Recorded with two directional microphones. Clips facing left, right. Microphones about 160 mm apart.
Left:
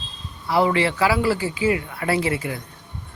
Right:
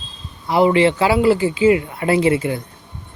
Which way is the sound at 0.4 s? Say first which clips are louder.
Right 5 dB; 20° right (ahead or behind).